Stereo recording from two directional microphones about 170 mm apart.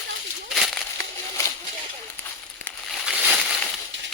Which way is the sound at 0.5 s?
Centre (ahead or behind).